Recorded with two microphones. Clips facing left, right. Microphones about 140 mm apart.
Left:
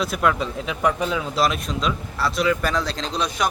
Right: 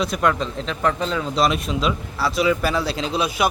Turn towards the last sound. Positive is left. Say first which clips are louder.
# right 3 dB
turn(degrees=-5)  # may be behind; listen again after turning